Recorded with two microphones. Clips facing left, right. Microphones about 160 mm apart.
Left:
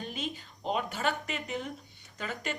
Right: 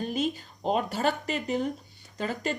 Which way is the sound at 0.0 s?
40° right (ahead or behind).